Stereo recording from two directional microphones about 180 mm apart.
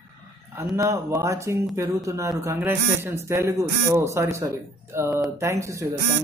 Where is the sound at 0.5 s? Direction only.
15° right (ahead or behind).